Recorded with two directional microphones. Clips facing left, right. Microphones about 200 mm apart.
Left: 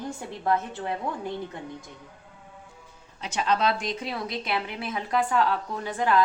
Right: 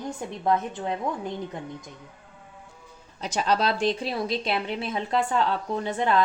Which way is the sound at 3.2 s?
35° right (ahead or behind).